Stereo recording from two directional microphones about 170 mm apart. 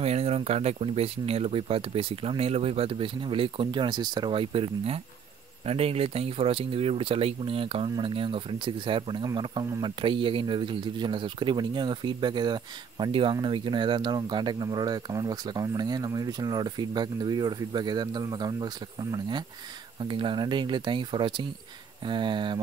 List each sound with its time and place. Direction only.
0.0 s speech: 35° right (ahead or behind)